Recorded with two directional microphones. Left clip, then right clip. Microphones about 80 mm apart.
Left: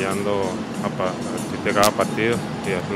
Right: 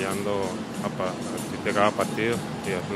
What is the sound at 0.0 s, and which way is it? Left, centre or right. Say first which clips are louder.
Speech: left 5 dB; right.